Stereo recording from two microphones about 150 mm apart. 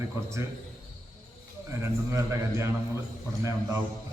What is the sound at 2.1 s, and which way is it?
Speech, 20° right (ahead or behind).